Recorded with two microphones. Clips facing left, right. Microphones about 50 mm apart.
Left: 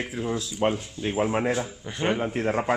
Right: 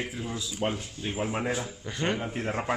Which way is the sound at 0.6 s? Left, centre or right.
Left.